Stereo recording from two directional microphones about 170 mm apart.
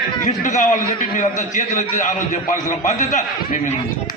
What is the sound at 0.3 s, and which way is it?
A man's voice, 45° left (ahead or behind).